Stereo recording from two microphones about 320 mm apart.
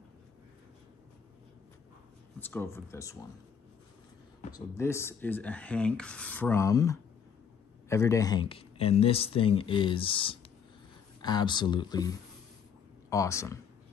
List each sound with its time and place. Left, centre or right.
2.4 s speech: centre
4.5 s speech: centre